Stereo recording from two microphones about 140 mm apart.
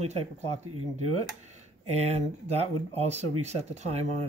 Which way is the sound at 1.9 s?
50° right (ahead or behind).